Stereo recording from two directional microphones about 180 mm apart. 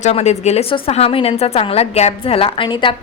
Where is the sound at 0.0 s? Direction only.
35° left (ahead or behind).